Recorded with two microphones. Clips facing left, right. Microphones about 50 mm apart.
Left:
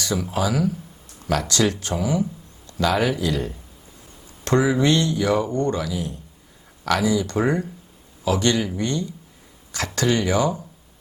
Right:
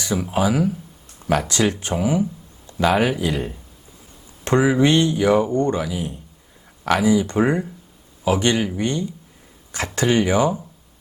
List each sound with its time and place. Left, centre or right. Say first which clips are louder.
0.0 s speech: right 3 dB; right